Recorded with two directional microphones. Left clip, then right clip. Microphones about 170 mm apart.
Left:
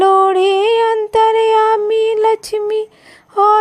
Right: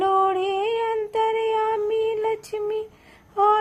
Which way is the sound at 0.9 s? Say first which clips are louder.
Left 11 dB; 40° left (ahead or behind).